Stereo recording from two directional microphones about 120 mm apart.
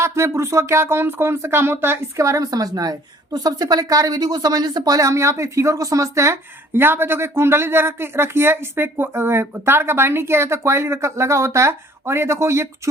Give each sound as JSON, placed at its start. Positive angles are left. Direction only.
{"t": 0.0, "sound": "speech", "side_deg": -20}